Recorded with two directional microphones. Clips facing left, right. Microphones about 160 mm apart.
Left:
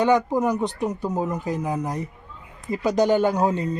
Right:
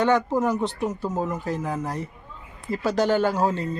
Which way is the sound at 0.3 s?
15° left (ahead or behind).